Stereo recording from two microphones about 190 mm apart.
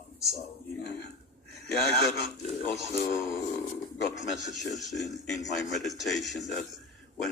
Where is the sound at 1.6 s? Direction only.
55° left (ahead or behind).